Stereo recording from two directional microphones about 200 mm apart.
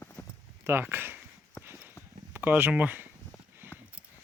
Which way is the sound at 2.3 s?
10° right (ahead or behind).